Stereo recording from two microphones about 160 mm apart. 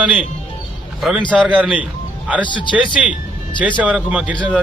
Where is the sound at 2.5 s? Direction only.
30° left (ahead or behind).